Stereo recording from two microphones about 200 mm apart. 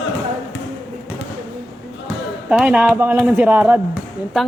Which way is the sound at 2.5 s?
5° right (ahead or behind).